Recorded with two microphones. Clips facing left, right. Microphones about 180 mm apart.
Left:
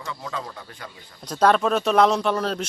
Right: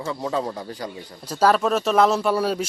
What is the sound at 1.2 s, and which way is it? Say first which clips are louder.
Speech: even; 5° right (ahead or behind).